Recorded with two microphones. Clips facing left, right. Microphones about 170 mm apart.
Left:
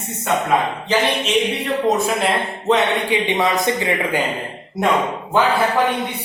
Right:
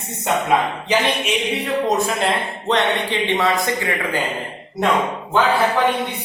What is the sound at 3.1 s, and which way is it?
Speech, 15° left (ahead or behind).